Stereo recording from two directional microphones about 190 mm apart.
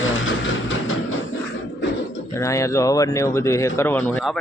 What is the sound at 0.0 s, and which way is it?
Train, 90° left.